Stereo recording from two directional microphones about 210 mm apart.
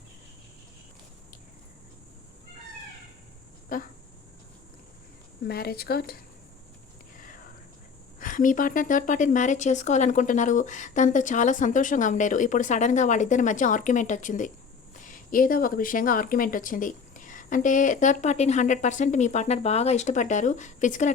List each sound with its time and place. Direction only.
3.7 s speech: 40° left (ahead or behind)
5.5 s a woman's voice: 45° left (ahead or behind)
8.2 s speech: 40° left (ahead or behind)